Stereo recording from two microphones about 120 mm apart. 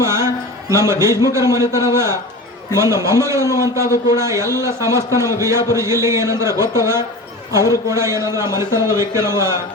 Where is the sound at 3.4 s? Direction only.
30° left (ahead or behind).